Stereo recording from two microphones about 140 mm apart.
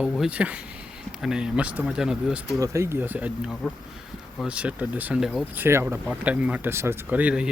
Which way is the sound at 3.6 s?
Centre (ahead or behind).